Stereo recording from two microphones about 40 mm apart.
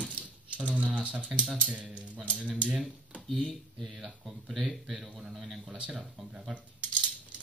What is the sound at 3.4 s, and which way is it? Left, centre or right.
A man's voice, centre.